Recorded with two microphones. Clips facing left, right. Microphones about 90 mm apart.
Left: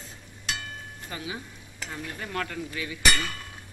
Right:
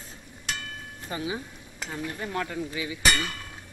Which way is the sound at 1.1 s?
25° right (ahead or behind).